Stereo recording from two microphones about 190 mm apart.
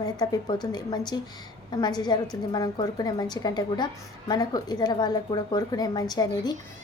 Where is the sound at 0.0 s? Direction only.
20° left (ahead or behind).